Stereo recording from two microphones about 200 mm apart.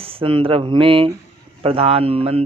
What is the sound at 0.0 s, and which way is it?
Speech, 30° right (ahead or behind).